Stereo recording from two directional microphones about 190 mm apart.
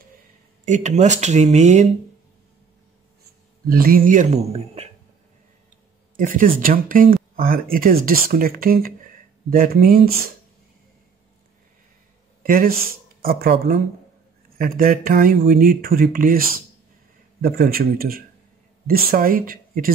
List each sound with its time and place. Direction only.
0.7 s speech: 40° right (ahead or behind)
3.6 s speech: 50° right (ahead or behind); by 4.8 s 30° right (ahead or behind)
6.1 s speech: 45° right (ahead or behind)
12.4 s speech: 50° right (ahead or behind)